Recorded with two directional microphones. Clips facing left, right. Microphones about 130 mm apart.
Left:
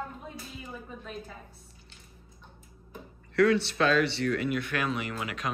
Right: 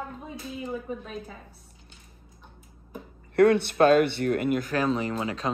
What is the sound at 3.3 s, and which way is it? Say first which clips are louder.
Speech: right 4 dB; 55° right (ahead or behind).